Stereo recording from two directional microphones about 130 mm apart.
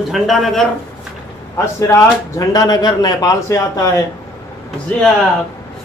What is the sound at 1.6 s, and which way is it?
Speech, 25° left (ahead or behind).